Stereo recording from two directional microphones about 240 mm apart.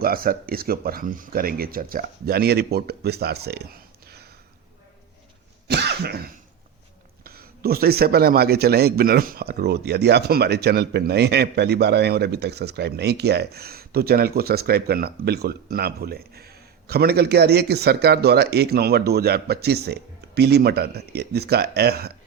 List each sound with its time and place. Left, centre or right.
0.0 s a man's voice: right
5.6 s cough: right
7.3 s a man's voice: right